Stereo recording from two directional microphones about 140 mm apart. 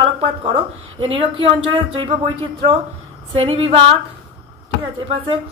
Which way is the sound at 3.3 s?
45° right (ahead or behind).